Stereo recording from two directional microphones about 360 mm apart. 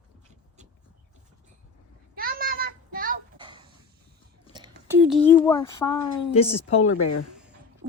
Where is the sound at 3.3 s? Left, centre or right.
Centre.